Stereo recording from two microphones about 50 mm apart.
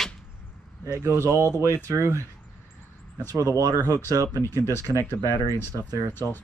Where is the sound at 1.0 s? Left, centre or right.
Right.